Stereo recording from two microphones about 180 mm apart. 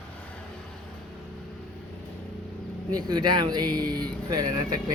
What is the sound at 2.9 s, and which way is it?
Speech, 20° right (ahead or behind).